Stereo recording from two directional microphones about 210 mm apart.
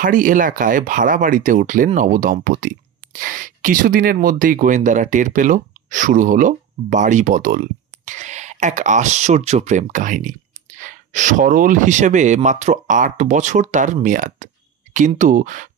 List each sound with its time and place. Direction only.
0.0 s speech: 40° right (ahead or behind)